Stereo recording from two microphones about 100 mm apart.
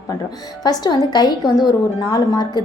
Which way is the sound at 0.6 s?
40° left (ahead or behind).